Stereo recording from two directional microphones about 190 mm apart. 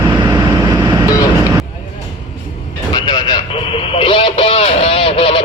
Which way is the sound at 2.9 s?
20° left (ahead or behind).